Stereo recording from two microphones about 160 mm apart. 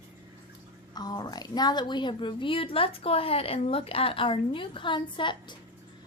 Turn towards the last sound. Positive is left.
turn(degrees=30)  # may be behind; listen again after turning